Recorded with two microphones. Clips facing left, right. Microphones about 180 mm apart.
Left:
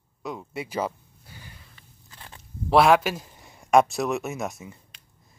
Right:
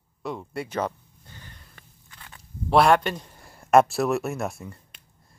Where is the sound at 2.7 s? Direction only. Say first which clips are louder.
Left 1 dB; centre (ahead or behind).